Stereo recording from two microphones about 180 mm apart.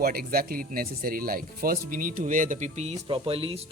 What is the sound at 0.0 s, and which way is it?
Speech, 55° right (ahead or behind).